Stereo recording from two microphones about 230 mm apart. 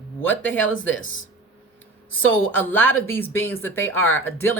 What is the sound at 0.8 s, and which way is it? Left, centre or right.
Speech, left.